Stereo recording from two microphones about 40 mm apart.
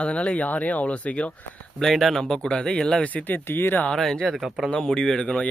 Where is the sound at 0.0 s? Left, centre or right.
Left.